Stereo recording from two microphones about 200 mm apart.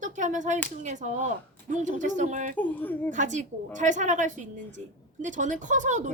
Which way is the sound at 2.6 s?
10° left (ahead or behind).